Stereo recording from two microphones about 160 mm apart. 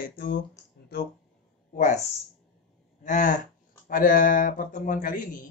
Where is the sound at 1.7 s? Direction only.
50° left (ahead or behind).